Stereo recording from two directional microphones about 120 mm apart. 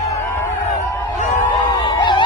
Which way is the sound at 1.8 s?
40° left (ahead or behind).